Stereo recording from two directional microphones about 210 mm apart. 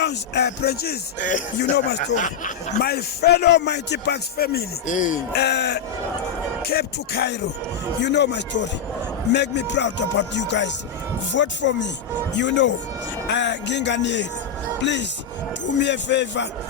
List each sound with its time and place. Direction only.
0.0 s a man's voice: 55° left (ahead or behind); by 5.2 s 35° left (ahead or behind)
5.3 s a man's voice: 50° left (ahead or behind)